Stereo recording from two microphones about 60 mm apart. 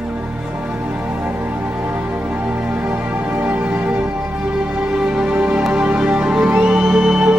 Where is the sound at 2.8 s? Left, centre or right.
Right.